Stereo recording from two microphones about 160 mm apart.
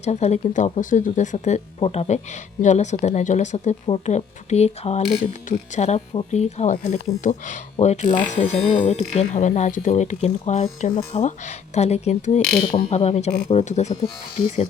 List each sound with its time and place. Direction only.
0.0 s speech: 45° left (ahead or behind)